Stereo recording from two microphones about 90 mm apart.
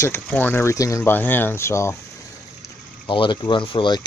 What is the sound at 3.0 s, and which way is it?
Speech, 60° left (ahead or behind).